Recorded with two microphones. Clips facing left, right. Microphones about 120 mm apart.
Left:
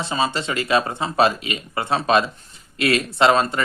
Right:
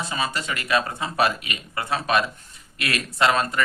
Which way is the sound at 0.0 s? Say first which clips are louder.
Left 5 dB; 30° left (ahead or behind).